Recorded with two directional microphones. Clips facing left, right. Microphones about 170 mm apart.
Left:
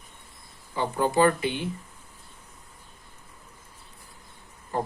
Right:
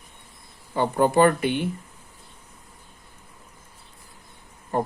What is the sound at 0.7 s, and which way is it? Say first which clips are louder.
Speech: right 5 dB; 60° right (ahead or behind).